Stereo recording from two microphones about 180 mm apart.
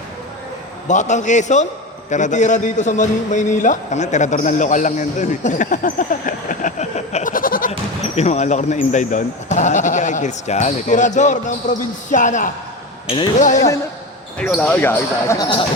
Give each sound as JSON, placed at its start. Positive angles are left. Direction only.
{"t": 0.9, "sound": "a man's voice", "side_deg": 40}
{"t": 7.7, "sound": "a man's voice", "side_deg": 35}
{"t": 14.3, "sound": "speech", "side_deg": 5}